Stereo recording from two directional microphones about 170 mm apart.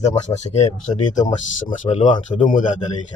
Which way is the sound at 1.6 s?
45° left (ahead or behind).